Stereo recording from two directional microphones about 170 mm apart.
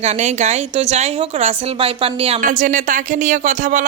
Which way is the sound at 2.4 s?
50° right (ahead or behind).